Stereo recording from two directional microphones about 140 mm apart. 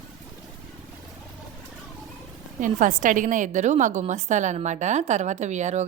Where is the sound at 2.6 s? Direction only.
65° right (ahead or behind).